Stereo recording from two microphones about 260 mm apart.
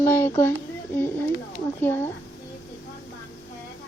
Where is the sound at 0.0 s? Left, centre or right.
Centre.